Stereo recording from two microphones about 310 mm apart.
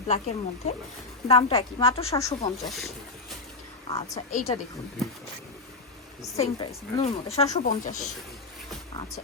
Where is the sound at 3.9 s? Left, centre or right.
Centre.